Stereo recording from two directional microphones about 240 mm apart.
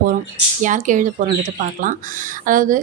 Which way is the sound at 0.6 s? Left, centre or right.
Right.